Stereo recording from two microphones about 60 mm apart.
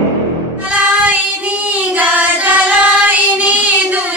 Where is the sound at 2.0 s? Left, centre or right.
Right.